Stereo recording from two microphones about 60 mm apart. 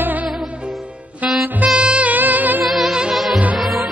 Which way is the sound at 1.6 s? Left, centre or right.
Centre.